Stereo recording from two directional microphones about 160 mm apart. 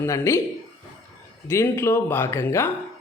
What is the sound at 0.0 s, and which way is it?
Speech, 15° left (ahead or behind).